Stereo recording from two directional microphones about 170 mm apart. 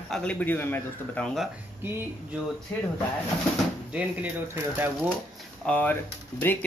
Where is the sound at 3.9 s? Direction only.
10° right (ahead or behind).